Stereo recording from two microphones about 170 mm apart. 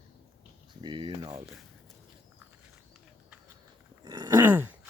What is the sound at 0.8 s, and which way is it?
Speech, 30° right (ahead or behind).